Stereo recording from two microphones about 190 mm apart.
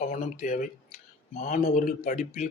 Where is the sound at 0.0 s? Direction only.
45° left (ahead or behind).